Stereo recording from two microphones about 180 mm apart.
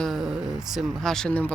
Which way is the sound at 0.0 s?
Centre (ahead or behind).